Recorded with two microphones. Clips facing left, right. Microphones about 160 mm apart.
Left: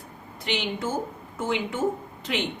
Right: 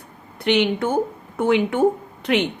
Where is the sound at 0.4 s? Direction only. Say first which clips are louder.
Right 10 dB; 65° right (ahead or behind).